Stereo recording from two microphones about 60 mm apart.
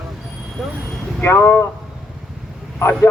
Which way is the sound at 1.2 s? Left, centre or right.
Left.